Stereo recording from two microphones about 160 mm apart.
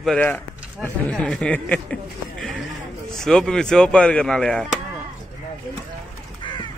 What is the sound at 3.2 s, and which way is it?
Speech, 5° left (ahead or behind).